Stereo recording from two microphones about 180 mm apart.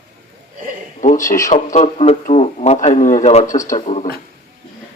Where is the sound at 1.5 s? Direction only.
40° left (ahead or behind).